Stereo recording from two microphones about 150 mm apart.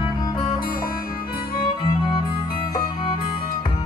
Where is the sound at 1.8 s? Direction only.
30° left (ahead or behind).